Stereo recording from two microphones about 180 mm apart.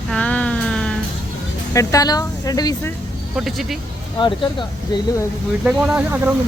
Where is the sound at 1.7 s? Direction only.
15° left (ahead or behind).